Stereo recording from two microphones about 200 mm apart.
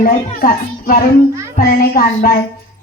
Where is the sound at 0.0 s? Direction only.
45° left (ahead or behind).